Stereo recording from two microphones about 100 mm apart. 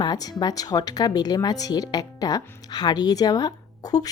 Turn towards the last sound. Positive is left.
turn(degrees=40)  # may be behind; listen again after turning